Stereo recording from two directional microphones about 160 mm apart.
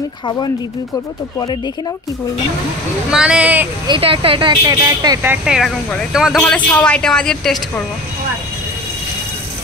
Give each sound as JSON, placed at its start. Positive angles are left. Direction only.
{"t": 3.1, "sound": "speech", "side_deg": -5}
{"t": 3.8, "sound": "speech", "side_deg": -30}
{"t": 5.3, "sound": "a woman's voice", "side_deg": -5}